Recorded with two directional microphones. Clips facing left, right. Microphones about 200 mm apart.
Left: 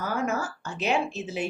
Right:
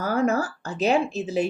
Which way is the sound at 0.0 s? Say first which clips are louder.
Right 6 dB; 35° right (ahead or behind).